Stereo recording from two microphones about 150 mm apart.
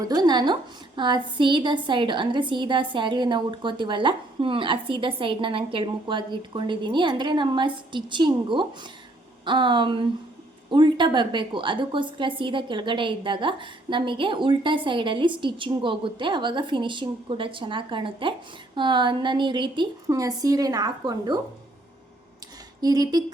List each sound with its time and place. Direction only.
0.0 s a woman's voice: 25° right (ahead or behind)
22.8 s a woman's voice: 25° right (ahead or behind)